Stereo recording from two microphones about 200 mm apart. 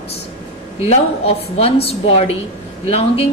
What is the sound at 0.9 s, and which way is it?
A woman's voice, 30° left (ahead or behind).